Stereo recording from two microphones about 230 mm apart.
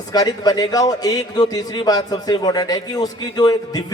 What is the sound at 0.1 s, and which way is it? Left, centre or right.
A man's voice, centre.